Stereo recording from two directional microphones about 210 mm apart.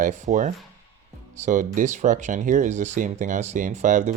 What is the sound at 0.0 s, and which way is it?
Speech, 35° right (ahead or behind).